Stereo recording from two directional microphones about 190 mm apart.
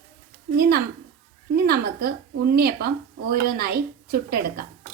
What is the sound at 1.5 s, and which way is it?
A woman's voice, 55° right (ahead or behind).